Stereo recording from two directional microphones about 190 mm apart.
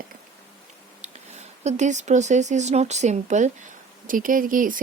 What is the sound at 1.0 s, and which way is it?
Speech, 35° right (ahead or behind).